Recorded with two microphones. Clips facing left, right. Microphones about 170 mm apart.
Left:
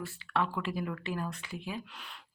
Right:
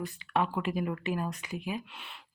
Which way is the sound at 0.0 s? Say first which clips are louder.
Right 2 dB; 15° right (ahead or behind).